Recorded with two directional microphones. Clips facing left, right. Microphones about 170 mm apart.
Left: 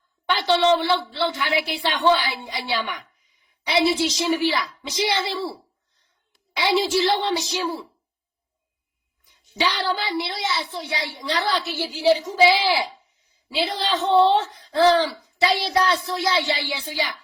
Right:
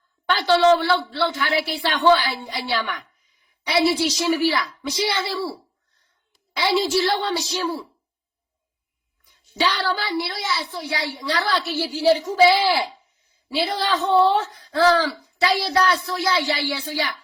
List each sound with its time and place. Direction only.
0.3 s a woman's voice: 20° left (ahead or behind)
9.6 s speech: 15° left (ahead or behind)